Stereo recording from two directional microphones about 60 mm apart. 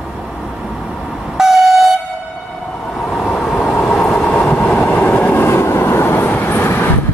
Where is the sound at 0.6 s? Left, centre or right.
Centre.